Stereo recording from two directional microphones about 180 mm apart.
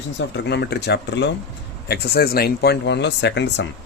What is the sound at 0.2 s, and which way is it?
Speech, 70° left (ahead or behind).